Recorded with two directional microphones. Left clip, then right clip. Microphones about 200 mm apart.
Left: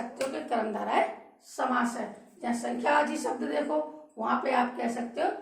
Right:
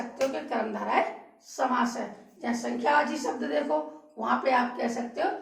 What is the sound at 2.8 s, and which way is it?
Speech, 40° left (ahead or behind).